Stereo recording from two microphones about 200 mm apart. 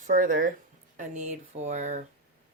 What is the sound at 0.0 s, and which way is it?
Speech, 40° right (ahead or behind).